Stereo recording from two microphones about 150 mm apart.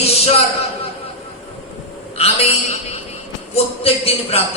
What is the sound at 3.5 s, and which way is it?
Speech, 40° left (ahead or behind).